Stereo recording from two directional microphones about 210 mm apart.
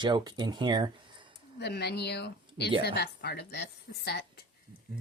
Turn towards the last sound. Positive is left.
turn(degrees=50)  # may be behind; listen again after turning